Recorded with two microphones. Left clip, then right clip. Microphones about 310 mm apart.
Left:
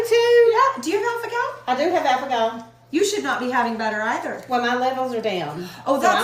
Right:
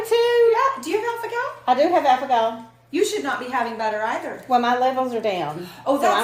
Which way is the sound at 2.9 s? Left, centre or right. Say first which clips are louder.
Left 1 dB; centre.